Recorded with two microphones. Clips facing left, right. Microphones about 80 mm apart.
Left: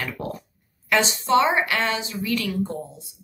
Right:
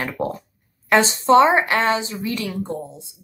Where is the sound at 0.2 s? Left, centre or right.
Right.